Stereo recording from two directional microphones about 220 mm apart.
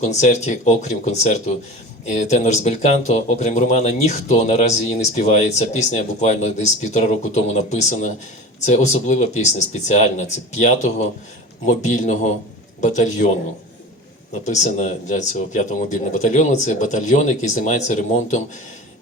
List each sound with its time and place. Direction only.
0.0 s speech: 30° left (ahead or behind)
14.4 s speech: 30° left (ahead or behind)